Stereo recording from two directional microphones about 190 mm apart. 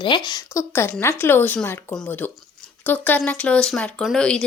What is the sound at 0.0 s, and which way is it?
A woman's voice, 25° left (ahead or behind).